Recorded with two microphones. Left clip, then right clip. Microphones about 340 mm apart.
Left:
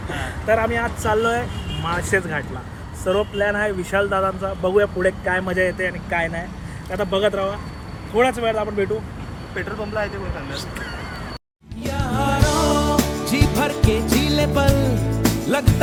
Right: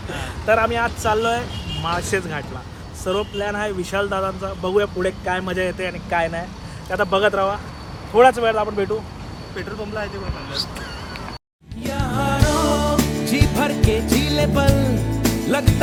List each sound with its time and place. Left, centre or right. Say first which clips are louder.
0.1 s speech: right 1 dB; centre
9.6 s speech: left 3 dB; centre
11.8 s music: even; centre